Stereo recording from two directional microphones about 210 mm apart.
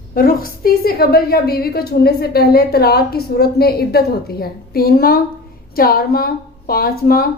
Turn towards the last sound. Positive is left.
turn(degrees=45)  # may be behind; listen again after turning